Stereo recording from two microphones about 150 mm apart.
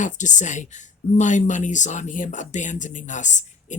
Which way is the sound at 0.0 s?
55° left (ahead or behind).